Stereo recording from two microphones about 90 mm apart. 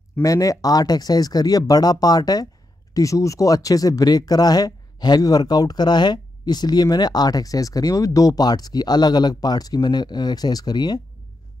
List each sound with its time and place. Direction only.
0.2 s speech: 40° left (ahead or behind)